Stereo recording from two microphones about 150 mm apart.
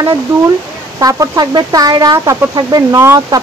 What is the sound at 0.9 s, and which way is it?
Speech, 25° right (ahead or behind).